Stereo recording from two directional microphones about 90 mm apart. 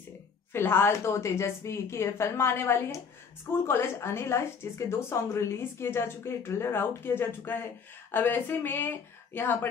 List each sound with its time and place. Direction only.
0.5 s a woman's voice: 25° left (ahead or behind)